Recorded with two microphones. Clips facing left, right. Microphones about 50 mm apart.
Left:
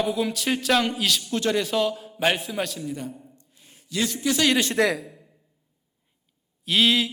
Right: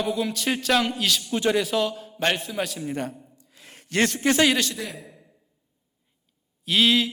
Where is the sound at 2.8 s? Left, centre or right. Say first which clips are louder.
Right 3 dB; right.